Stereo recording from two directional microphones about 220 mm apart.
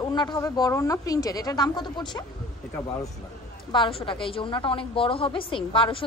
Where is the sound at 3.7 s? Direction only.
20° left (ahead or behind).